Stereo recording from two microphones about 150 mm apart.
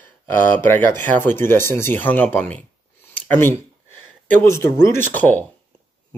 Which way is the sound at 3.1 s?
10° left (ahead or behind).